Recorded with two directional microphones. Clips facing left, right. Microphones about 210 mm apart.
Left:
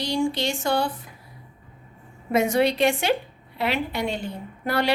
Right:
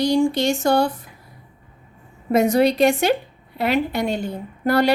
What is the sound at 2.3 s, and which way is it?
A woman's voice, 40° right (ahead or behind).